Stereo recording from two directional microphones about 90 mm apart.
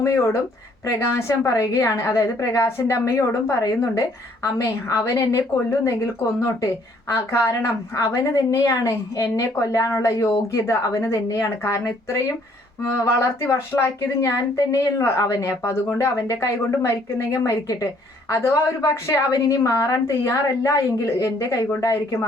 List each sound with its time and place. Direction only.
0.0 s a woman's voice: 35° left (ahead or behind)
7.1 s a woman's voice: 30° left (ahead or behind)